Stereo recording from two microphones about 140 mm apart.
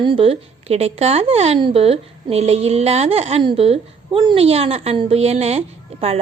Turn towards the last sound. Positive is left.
turn(degrees=-45)  # may be behind; listen again after turning